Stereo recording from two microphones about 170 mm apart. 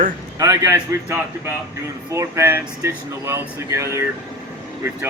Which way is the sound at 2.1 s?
15° right (ahead or behind).